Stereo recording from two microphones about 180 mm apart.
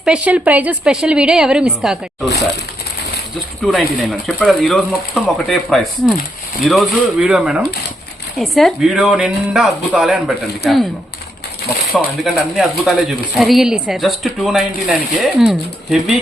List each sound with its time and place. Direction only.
0.0 s speech: 5° right (ahead or behind)
3.6 s speech: 5° left (ahead or behind)
11.9 s speech: centre (ahead or behind)